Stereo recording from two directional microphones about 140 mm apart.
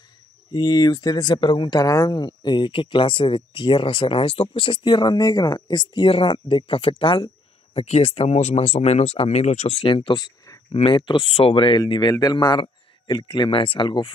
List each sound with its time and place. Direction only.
0.5 s speech: 30° left (ahead or behind)
10.7 s speech: 40° left (ahead or behind)